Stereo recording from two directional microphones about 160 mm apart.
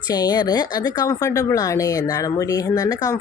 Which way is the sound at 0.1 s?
25° left (ahead or behind).